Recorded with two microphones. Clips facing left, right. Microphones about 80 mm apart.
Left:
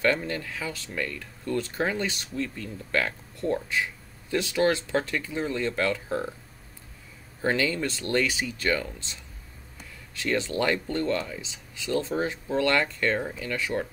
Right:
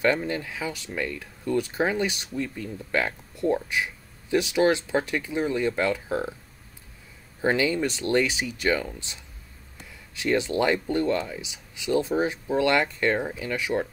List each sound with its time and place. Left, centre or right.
0.0 s speech: centre
7.4 s speech: centre